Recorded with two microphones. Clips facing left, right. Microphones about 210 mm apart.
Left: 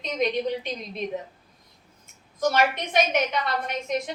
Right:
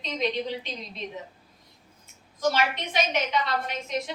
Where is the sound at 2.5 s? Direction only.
50° left (ahead or behind).